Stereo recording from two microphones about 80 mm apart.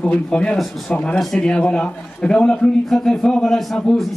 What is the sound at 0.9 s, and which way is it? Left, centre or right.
A man's voice, centre.